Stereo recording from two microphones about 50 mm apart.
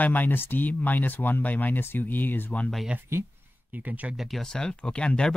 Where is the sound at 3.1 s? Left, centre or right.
Right.